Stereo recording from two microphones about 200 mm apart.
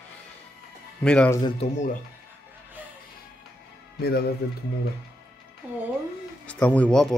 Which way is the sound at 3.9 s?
50° left (ahead or behind).